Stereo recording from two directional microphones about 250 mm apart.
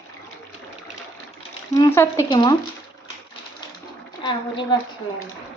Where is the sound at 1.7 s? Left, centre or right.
Centre.